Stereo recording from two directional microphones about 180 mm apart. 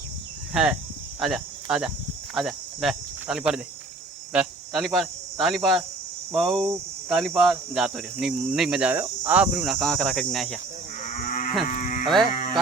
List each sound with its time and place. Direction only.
0.5 s speech: 5° right (ahead or behind)
11.0 s livestock: 45° left (ahead or behind)
11.7 s sheep: 40° left (ahead or behind)